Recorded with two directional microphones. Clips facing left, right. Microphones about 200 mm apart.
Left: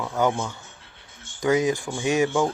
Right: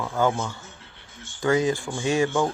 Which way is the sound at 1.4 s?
20° left (ahead or behind).